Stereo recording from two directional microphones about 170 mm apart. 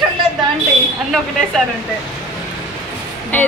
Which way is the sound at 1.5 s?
5° left (ahead or behind).